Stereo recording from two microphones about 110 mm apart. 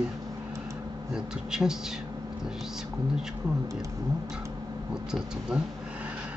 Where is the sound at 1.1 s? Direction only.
5° right (ahead or behind).